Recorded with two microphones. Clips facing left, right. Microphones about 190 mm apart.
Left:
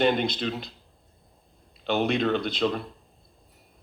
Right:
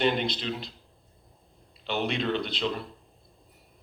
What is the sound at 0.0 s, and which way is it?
Speech, 45° left (ahead or behind).